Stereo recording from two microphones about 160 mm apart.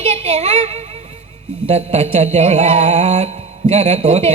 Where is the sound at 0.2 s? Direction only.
45° right (ahead or behind).